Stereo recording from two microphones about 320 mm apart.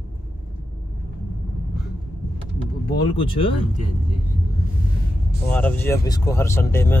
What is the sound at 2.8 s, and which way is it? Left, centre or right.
Speech, centre.